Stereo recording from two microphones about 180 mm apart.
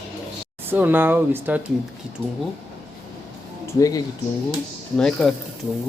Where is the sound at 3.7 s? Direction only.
20° left (ahead or behind).